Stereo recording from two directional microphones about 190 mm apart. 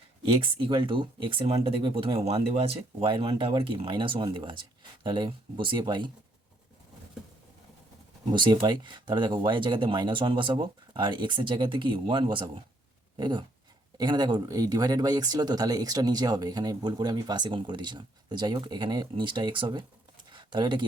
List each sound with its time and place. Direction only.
0.3 s speech: 30° right (ahead or behind)
8.3 s speech: 25° right (ahead or behind)
20.3 s a sound: 25° right (ahead or behind)